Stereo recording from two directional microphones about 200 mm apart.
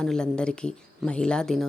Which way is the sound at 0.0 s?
5° left (ahead or behind).